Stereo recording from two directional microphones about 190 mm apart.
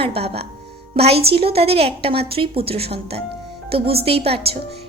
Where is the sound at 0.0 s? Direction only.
30° right (ahead or behind).